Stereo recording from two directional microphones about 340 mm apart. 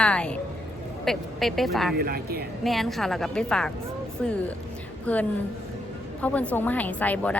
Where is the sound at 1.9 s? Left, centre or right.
Right.